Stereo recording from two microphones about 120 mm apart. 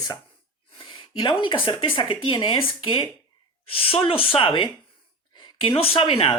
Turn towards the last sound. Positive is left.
turn(degrees=45)  # may be behind; listen again after turning